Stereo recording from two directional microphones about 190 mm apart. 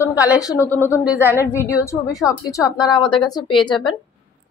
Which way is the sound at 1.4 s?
15° left (ahead or behind).